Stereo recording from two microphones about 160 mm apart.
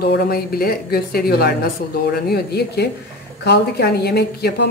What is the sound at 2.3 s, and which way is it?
Speech, 90° left.